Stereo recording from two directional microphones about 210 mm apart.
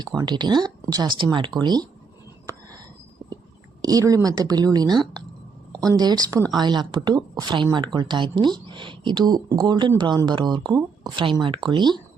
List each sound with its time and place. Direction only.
0.0 s speech: 20° right (ahead or behind)
3.8 s a woman's voice: 15° right (ahead or behind)
6.0 s a woman's voice: 20° right (ahead or behind)